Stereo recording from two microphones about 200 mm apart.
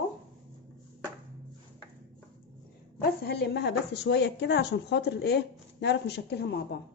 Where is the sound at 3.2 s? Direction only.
50° left (ahead or behind).